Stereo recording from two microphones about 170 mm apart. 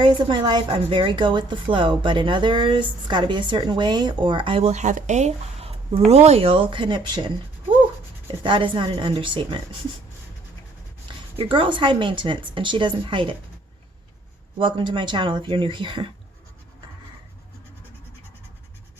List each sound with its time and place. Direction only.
0.0 s a woman's voice: 25° right (ahead or behind)
8.4 s a woman's voice: 30° right (ahead or behind)
11.3 s a woman's voice: 30° right (ahead or behind)
14.6 s a woman's voice: 30° right (ahead or behind)